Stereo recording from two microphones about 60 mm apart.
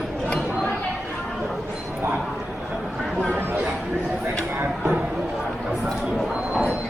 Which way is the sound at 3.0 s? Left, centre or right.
Centre.